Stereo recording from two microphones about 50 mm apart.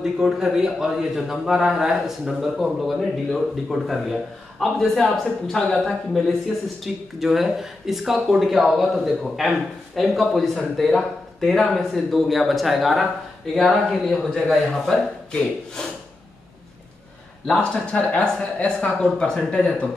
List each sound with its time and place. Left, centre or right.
0.0 s a man's voice: centre
17.6 s speech: left